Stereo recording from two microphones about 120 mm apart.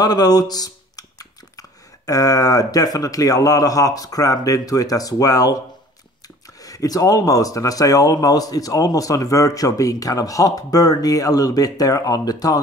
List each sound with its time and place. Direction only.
0.0 s speech: 35° left (ahead or behind)